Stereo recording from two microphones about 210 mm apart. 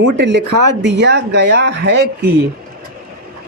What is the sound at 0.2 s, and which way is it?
Speech, 55° right (ahead or behind).